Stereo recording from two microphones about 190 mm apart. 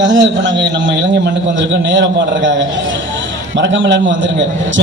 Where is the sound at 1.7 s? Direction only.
70° right (ahead or behind).